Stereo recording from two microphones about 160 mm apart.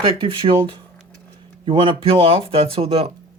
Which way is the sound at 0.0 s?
35° right (ahead or behind).